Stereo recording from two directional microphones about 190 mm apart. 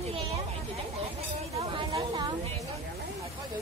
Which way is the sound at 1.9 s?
30° right (ahead or behind).